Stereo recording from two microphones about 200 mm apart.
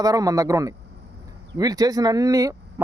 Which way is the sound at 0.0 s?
15° right (ahead or behind).